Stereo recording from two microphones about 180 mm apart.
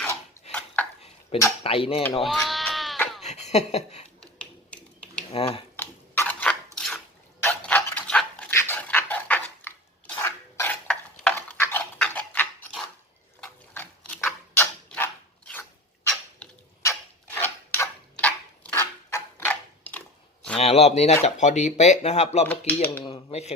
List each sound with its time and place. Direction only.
0.4 s a sound: 35° left (ahead or behind)
1.3 s speech: 30° left (ahead or behind)
2.2 s sheep: centre (ahead or behind)
3.2 s a sound: 40° left (ahead or behind)
5.3 s speech: 30° left (ahead or behind)
5.7 s a sound: 10° left (ahead or behind)
7.4 s dog: 10° left (ahead or behind)
13.4 s pig: 10° left (ahead or behind)
14.5 s mechanisms: 10° left (ahead or behind)
16.9 s a sound: 10° left (ahead or behind)
20.6 s speech: 35° left (ahead or behind)
22.4 s dishes: 10° left (ahead or behind)
23.0 s speech: 35° left (ahead or behind)